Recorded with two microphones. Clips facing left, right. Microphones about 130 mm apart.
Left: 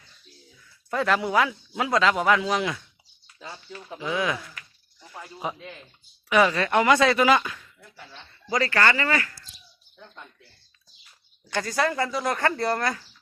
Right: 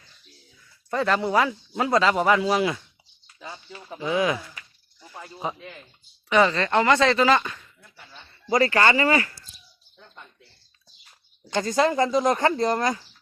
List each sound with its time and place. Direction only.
0.9 s speech: centre (ahead or behind)
3.4 s a sound: 10° right (ahead or behind)
3.8 s speech: 5° right (ahead or behind)
8.6 s speech: 20° right (ahead or behind)
11.4 s speech: 20° right (ahead or behind)